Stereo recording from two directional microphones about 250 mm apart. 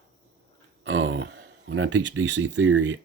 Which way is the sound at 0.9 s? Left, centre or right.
Right.